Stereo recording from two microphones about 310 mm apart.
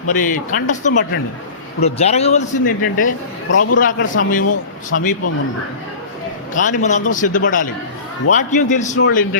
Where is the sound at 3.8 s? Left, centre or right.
Left.